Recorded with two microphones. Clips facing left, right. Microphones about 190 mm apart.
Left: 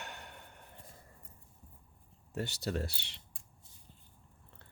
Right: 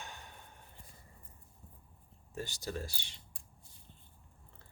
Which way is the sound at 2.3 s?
65° left (ahead or behind).